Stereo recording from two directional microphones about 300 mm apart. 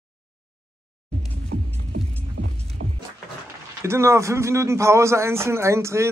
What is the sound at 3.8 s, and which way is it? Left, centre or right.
Speech, centre.